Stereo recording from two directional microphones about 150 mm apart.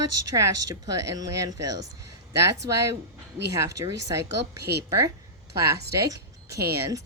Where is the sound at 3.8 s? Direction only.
25° right (ahead or behind).